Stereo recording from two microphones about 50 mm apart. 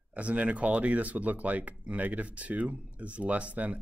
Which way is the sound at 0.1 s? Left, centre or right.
Right.